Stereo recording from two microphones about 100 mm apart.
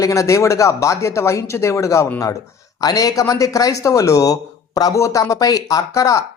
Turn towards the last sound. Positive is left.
turn(degrees=35)  # may be behind; listen again after turning